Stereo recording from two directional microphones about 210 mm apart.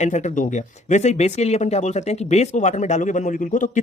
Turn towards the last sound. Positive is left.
turn(degrees=40)  # may be behind; listen again after turning